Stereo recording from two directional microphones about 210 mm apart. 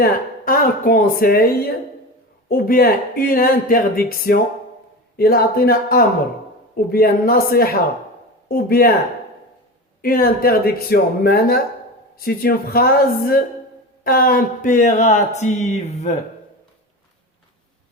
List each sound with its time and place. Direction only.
0.0 s speech: 45° left (ahead or behind)
2.5 s speech: 45° left (ahead or behind)
10.0 s speech: 45° left (ahead or behind)